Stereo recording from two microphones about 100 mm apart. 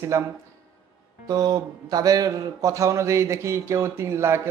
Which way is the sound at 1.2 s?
40° right (ahead or behind).